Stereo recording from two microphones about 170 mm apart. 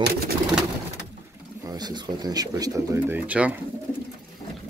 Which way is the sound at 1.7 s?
25° right (ahead or behind).